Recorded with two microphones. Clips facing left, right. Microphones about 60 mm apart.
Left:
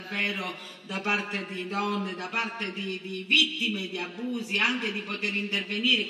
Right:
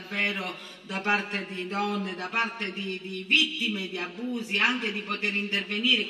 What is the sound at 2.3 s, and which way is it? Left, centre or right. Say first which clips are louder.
A man's voice: right 3 dB; right.